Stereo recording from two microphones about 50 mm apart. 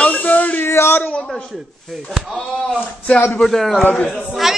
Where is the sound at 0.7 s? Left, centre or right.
Left.